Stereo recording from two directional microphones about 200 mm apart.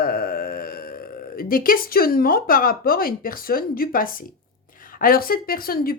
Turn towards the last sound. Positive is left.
turn(degrees=45)  # may be behind; listen again after turning